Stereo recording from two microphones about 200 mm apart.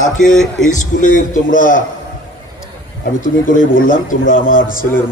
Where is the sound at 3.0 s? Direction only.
45° left (ahead or behind).